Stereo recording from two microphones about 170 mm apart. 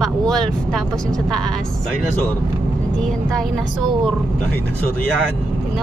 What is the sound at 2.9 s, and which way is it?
Speech, centre (ahead or behind).